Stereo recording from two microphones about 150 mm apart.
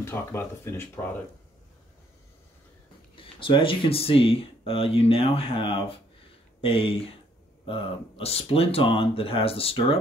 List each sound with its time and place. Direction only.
0.0 s speech: 15° left (ahead or behind)
3.2 s speech: 35° left (ahead or behind)